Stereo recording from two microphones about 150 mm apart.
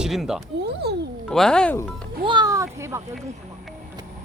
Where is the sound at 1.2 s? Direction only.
5° left (ahead or behind).